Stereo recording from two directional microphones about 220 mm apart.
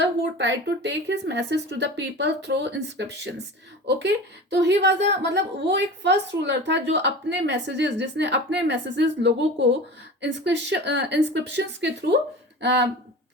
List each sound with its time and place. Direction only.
0.0 s a woman's voice: 55° right (ahead or behind)